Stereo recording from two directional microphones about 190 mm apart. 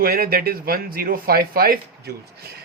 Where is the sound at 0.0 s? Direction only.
50° right (ahead or behind).